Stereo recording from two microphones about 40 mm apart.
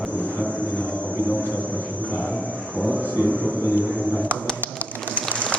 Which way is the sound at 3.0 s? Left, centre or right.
Right.